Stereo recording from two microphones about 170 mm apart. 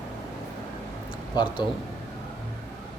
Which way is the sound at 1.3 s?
30° left (ahead or behind).